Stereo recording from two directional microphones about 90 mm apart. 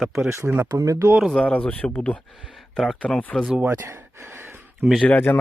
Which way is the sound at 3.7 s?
30° right (ahead or behind).